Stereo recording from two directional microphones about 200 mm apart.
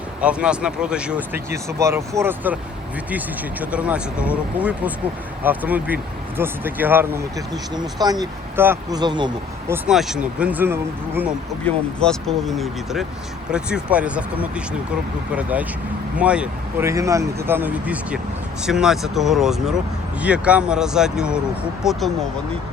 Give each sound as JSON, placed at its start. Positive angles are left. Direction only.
{"t": 0.2, "sound": "speech", "side_deg": -5}
{"t": 9.7, "sound": "speech", "side_deg": -5}
{"t": 11.6, "sound": "speech", "side_deg": 5}
{"t": 15.4, "sound": "speech", "side_deg": -5}